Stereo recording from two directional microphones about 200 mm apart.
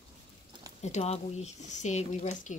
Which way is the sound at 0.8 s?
35° left (ahead or behind).